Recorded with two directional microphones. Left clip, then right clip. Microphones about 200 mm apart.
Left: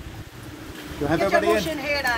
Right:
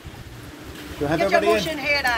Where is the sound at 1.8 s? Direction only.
50° left (ahead or behind).